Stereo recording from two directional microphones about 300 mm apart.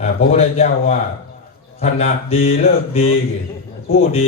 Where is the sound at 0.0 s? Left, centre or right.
Left.